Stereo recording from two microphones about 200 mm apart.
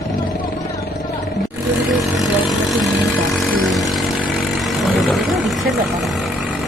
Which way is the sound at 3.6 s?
Centre (ahead or behind).